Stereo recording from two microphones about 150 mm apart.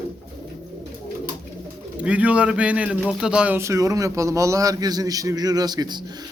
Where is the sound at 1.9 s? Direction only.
10° right (ahead or behind).